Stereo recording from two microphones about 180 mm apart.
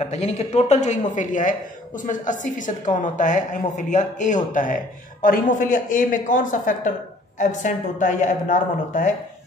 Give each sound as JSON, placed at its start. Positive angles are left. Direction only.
{"t": 0.0, "sound": "a man's voice", "side_deg": 40}